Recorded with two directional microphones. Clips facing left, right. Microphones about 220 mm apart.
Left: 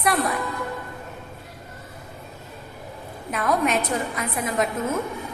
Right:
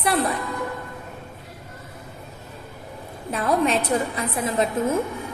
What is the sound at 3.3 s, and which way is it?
A woman's voice, 30° right (ahead or behind).